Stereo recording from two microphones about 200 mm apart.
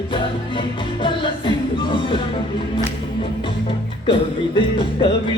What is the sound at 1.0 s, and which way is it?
Music, 25° left (ahead or behind).